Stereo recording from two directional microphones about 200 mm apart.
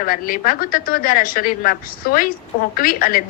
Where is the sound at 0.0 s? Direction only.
45° left (ahead or behind).